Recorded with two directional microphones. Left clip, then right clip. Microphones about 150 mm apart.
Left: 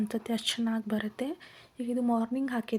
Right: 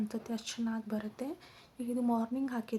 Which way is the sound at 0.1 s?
25° left (ahead or behind).